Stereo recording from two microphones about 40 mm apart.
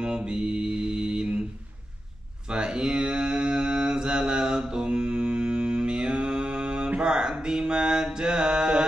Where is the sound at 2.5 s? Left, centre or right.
Centre.